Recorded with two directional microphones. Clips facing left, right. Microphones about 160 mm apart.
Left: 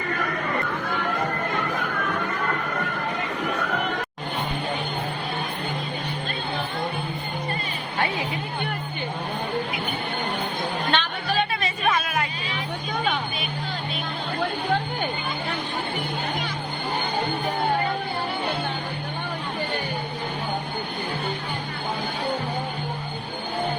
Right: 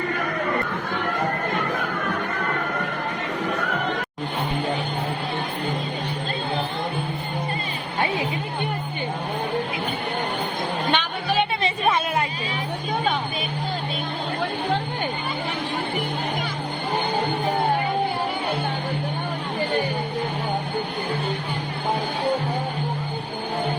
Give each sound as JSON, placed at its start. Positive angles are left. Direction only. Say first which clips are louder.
{"t": 10.9, "sound": "music", "louder": "right 2 dB", "side_deg": -20}